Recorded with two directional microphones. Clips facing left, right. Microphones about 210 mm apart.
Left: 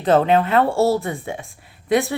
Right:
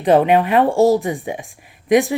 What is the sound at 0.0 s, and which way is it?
Speech, 15° right (ahead or behind).